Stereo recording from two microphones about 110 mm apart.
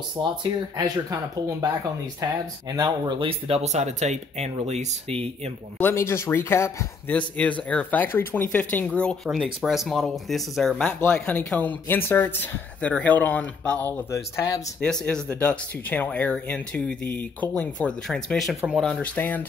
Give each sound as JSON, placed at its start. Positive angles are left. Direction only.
{"t": 0.4, "sound": "speech", "side_deg": -40}
{"t": 2.7, "sound": "speech", "side_deg": -40}
{"t": 3.3, "sound": "speech", "side_deg": -65}
{"t": 5.8, "sound": "speech", "side_deg": 20}
{"t": 7.1, "sound": "speech", "side_deg": 10}
{"t": 9.3, "sound": "speech", "side_deg": -5}
{"t": 10.8, "sound": "speech", "side_deg": 15}
{"t": 14.1, "sound": "speech", "side_deg": 30}
{"t": 14.8, "sound": "speech", "side_deg": 5}